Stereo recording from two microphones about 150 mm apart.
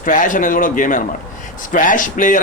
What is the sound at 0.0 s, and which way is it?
A man's voice, 60° left (ahead or behind).